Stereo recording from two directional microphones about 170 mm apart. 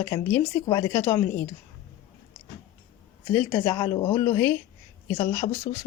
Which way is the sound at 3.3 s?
15° left (ahead or behind).